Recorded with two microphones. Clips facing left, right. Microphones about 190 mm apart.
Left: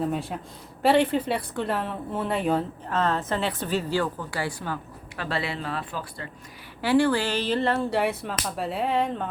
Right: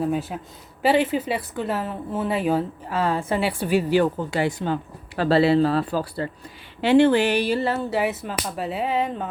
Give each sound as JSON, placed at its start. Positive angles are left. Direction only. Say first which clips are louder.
{"t": 0.0, "sound": "a woman's voice", "louder": "right 3 dB", "side_deg": -5}
{"t": 6.8, "sound": "speech", "louder": "right 5 dB", "side_deg": -20}